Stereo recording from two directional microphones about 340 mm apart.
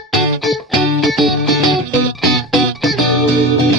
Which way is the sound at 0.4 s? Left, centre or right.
Centre.